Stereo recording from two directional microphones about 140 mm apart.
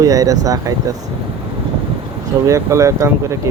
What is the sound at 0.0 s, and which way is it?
Speech, 25° right (ahead or behind).